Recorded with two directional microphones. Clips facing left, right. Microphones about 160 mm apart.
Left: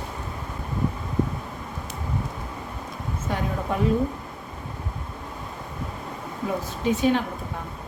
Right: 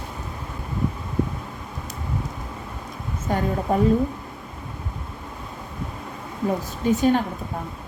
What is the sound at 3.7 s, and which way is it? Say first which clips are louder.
Speech: right 5 dB; 40° right (ahead or behind).